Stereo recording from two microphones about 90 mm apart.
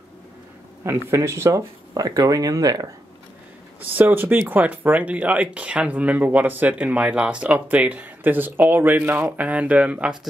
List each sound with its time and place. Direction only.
0.8 s speech: 30° right (ahead or behind); by 2.9 s 45° right (ahead or behind)
3.8 s speech: 20° right (ahead or behind)